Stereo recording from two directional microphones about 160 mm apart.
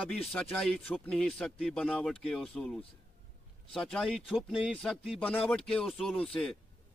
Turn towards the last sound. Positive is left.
turn(degrees=5)  # may be behind; listen again after turning